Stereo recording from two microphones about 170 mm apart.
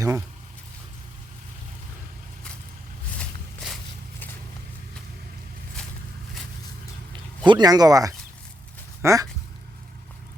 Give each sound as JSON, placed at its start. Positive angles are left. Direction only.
{"t": 0.0, "sound": "speech", "side_deg": -20}
{"t": 3.2, "sound": "walk", "side_deg": 0}
{"t": 7.4, "sound": "speech", "side_deg": -25}
{"t": 9.0, "sound": "a sound", "side_deg": -20}